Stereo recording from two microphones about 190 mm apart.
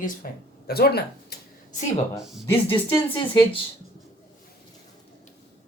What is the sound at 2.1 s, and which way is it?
Speech, centre (ahead or behind).